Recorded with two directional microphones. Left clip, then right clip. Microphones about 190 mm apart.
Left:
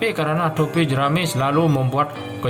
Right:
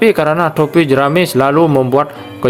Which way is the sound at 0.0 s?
45° right (ahead or behind).